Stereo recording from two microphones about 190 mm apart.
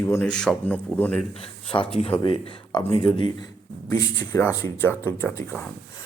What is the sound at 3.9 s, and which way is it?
Speech, 15° left (ahead or behind).